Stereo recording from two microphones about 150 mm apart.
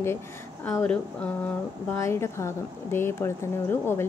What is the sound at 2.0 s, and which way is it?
A woman's voice, 20° left (ahead or behind).